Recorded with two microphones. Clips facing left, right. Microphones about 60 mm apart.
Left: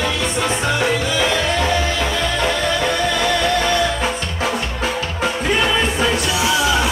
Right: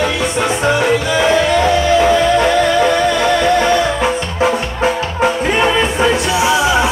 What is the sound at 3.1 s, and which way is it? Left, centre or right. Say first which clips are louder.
Music: right 5 dB; right.